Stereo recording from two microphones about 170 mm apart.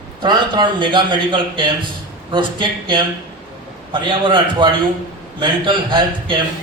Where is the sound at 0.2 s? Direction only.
25° right (ahead or behind).